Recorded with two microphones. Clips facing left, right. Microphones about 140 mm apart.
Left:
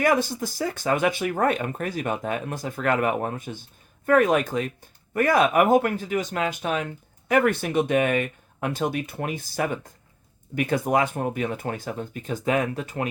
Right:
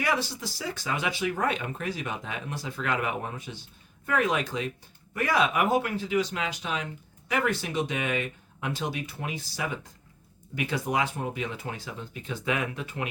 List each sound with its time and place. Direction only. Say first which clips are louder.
0.0 s speech: left 7 dB; 50° left (ahead or behind)